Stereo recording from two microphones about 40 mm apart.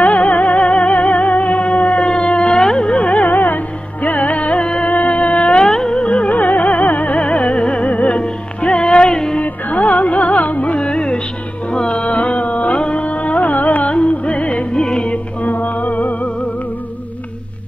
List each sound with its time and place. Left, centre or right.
0.0 s music: left
3.1 s music: left
5.6 s music: centre
5.9 s music: left
7.2 s music: left
9.4 s music: left
10.9 s music: left
13.9 s music: left
14.8 s music: centre
15.4 s music: left